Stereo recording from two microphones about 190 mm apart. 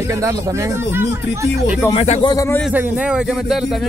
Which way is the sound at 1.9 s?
35° left (ahead or behind).